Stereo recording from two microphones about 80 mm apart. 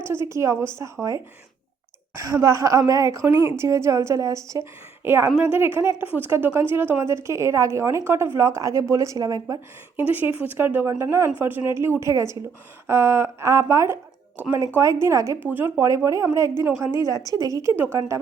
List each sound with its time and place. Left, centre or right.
0.0 s a woman's voice: right
2.1 s a woman's voice: right
5.0 s a woman's voice: right
10.1 s a woman's voice: right
11.3 s a woman's voice: right
15.0 s a woman's voice: right
15.4 s a woman's voice: right
16.0 s a woman's voice: right